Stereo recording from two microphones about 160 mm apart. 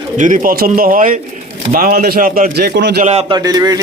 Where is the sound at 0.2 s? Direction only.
55° right (ahead or behind); by 2.9 s 90° right.